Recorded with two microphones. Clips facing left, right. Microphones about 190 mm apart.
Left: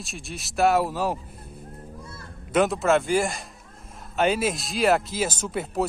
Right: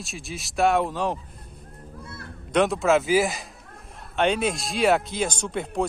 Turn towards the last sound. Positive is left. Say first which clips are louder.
# even
turn(degrees=5)  # may be behind; listen again after turning